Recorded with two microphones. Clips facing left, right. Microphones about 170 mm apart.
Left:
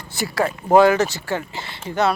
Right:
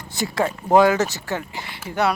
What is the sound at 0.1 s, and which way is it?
Speech, 20° right (ahead or behind).